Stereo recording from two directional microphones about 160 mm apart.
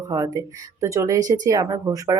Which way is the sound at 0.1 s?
20° right (ahead or behind).